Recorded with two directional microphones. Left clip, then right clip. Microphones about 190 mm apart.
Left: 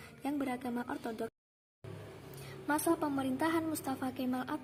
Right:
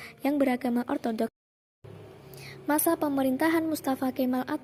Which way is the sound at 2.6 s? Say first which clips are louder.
Right 6 dB; 35° right (ahead or behind).